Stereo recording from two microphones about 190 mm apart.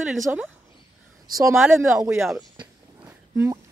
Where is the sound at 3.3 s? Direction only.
15° right (ahead or behind).